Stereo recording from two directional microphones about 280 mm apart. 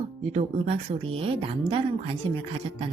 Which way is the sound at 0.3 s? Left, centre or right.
Right.